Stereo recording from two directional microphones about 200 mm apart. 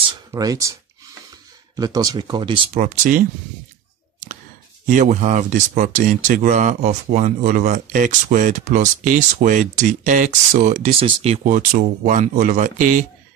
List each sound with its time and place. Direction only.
0.3 s speech: 15° right (ahead or behind)
1.8 s speech: 20° right (ahead or behind); by 3.3 s 40° right (ahead or behind)
4.9 s speech: 35° right (ahead or behind)